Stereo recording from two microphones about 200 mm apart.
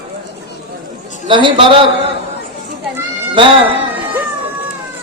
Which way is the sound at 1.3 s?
25° right (ahead or behind).